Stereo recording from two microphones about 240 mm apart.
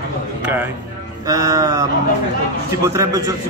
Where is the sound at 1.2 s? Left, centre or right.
Centre.